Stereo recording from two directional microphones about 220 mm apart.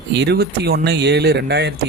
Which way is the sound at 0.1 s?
50° right (ahead or behind).